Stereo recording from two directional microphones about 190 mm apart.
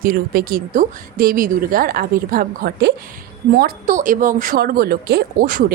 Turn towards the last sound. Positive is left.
turn(degrees=-50)  # may be behind; listen again after turning